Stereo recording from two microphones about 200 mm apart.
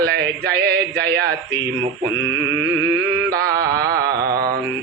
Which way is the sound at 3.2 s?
50° right (ahead or behind).